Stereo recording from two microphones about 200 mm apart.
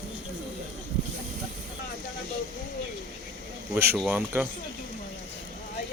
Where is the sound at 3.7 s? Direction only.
10° right (ahead or behind).